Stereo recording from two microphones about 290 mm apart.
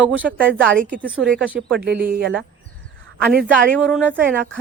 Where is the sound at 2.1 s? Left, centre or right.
Right.